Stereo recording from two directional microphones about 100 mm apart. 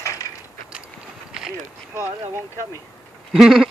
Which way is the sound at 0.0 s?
30° left (ahead or behind).